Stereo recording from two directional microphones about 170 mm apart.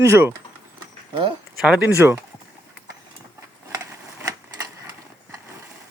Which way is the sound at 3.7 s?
20° right (ahead or behind).